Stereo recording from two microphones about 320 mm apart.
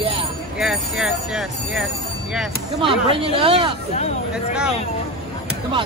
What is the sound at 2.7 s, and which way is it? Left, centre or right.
Speech, centre.